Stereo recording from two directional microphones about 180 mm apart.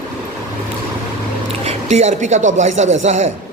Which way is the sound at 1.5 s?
35° right (ahead or behind).